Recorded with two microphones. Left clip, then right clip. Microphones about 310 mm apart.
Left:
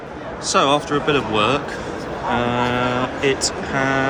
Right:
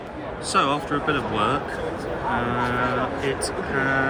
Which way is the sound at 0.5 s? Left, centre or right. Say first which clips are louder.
Left 5 dB; centre.